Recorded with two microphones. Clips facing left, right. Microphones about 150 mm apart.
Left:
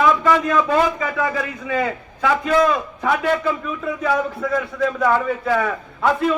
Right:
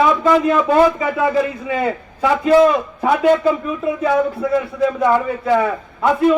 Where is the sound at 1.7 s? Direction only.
25° right (ahead or behind).